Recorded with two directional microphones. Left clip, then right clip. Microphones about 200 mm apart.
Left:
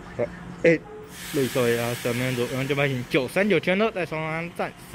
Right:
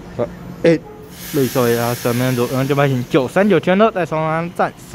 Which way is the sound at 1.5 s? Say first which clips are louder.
Right 7 dB; 5° right (ahead or behind).